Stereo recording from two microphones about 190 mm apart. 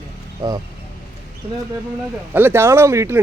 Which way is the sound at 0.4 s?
20° right (ahead or behind).